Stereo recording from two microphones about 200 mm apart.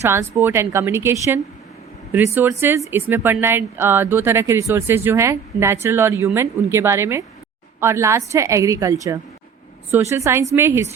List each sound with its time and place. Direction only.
0.0 s speech: 10° right (ahead or behind)